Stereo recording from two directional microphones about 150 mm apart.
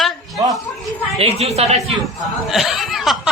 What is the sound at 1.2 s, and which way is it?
Speech, 45° right (ahead or behind).